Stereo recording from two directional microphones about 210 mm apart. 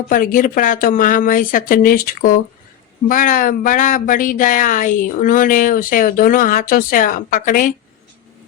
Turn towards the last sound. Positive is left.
turn(degrees=40)  # may be behind; listen again after turning